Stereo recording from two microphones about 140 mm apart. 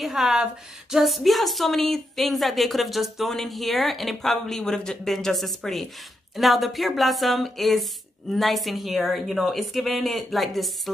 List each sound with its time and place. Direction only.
0.0 s speech: centre (ahead or behind)